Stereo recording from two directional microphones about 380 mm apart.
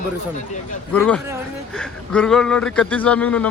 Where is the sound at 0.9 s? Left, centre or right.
Centre.